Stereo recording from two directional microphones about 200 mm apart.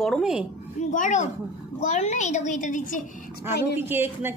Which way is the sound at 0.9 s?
40° left (ahead or behind).